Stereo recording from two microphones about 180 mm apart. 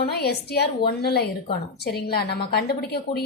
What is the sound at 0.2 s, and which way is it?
A woman's voice, 65° left (ahead or behind).